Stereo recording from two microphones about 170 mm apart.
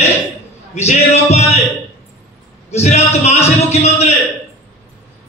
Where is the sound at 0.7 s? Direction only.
40° left (ahead or behind).